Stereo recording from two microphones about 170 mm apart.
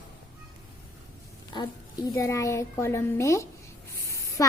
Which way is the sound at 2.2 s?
15° left (ahead or behind).